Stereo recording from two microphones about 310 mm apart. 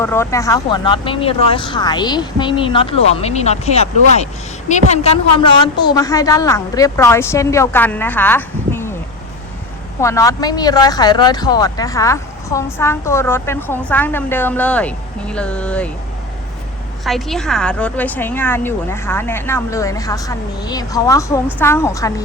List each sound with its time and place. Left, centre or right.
0.0 s speech: centre
10.0 s speech: centre
17.0 s speech: centre